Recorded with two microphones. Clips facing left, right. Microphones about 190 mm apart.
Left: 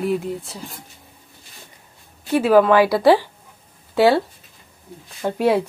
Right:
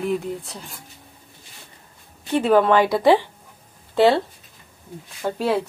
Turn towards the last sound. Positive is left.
turn(degrees=10)  # may be behind; listen again after turning